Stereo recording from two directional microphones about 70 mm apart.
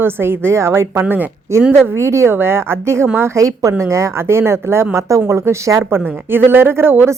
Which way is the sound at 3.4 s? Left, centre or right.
Right.